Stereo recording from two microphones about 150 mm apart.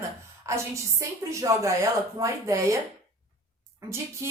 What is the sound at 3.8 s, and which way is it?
Speech, 20° right (ahead or behind).